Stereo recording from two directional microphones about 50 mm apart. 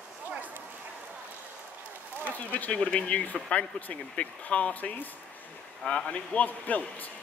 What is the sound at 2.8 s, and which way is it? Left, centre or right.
Speech, left.